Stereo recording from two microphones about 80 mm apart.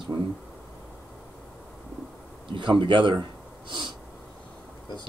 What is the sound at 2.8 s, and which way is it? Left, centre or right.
Speech, right.